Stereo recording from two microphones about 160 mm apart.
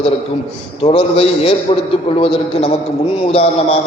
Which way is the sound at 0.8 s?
35° left (ahead or behind).